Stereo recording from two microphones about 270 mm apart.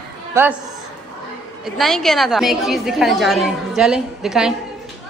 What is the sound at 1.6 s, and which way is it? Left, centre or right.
A woman's voice, centre.